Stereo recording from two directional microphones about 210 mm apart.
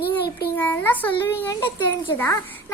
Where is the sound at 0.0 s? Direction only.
50° left (ahead or behind).